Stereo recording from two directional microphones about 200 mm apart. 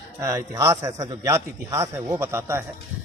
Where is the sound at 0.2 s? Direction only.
15° right (ahead or behind).